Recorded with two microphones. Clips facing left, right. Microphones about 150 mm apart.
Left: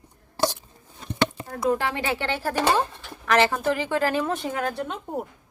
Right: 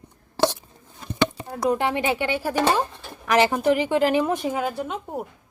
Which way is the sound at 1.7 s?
20° right (ahead or behind).